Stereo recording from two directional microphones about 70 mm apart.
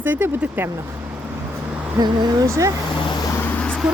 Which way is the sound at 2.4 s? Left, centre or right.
Right.